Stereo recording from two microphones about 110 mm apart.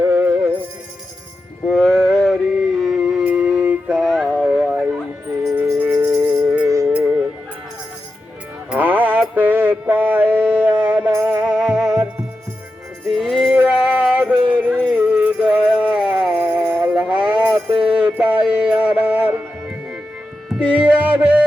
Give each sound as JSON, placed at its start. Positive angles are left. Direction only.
{"t": 0.0, "sound": "music", "side_deg": -20}
{"t": 1.6, "sound": "music", "side_deg": 5}
{"t": 6.1, "sound": "music", "side_deg": -10}
{"t": 8.7, "sound": "mantra", "side_deg": -15}
{"t": 13.1, "sound": "music", "side_deg": 0}